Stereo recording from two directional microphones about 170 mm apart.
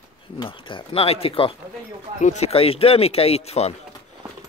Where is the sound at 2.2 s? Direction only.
45° left (ahead or behind).